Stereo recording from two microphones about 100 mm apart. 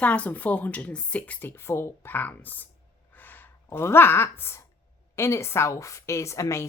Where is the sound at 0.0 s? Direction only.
15° left (ahead or behind).